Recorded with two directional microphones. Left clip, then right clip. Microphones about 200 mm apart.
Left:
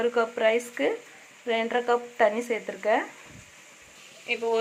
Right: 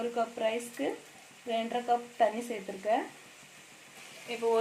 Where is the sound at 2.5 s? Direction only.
15° left (ahead or behind).